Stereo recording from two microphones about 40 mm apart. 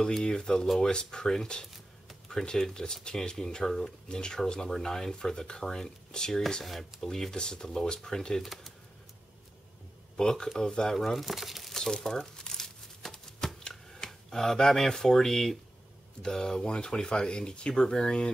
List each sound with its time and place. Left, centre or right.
0.0 s speech: centre
6.6 s speech: centre
8.4 s speech: centre
10.1 s speech: centre
11.7 s crumpling: centre
16.2 s speech: centre